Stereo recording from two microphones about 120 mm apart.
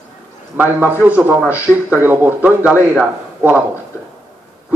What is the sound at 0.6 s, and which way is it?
A man's voice, 15° right (ahead or behind).